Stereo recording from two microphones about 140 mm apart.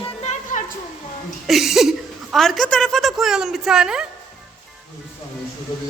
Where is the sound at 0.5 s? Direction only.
65° left (ahead or behind).